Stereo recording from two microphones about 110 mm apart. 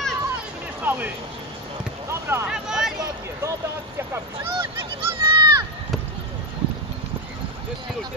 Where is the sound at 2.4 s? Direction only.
5° right (ahead or behind).